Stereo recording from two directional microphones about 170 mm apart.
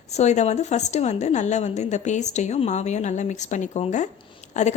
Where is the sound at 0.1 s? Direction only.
40° left (ahead or behind).